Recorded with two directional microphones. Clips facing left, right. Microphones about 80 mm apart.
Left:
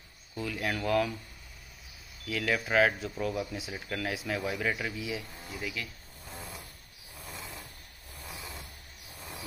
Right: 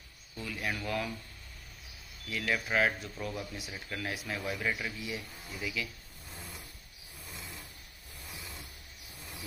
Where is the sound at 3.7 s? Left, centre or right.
Left.